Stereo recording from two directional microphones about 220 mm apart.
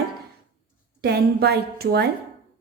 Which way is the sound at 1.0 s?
45° right (ahead or behind).